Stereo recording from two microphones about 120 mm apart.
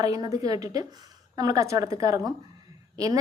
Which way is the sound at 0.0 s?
30° right (ahead or behind).